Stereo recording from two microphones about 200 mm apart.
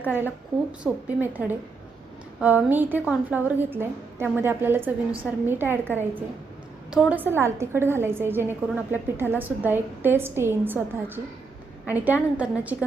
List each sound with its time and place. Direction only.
0.0 s a woman's voice: 10° right (ahead or behind)